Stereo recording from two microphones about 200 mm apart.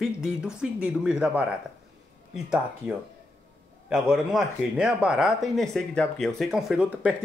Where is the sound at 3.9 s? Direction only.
5° right (ahead or behind).